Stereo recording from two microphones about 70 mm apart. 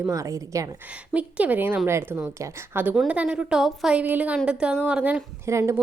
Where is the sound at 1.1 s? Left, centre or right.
Right.